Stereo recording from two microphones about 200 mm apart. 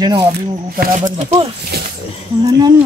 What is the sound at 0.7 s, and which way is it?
Speech, 45° right (ahead or behind).